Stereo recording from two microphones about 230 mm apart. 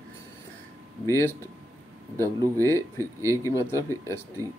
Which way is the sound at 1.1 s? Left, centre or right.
Centre.